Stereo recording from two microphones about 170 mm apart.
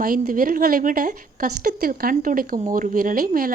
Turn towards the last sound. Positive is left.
turn(degrees=-55)  # may be behind; listen again after turning